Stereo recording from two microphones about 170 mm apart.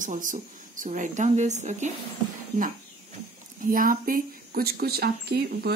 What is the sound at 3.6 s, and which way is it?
Speech, 55° right (ahead or behind).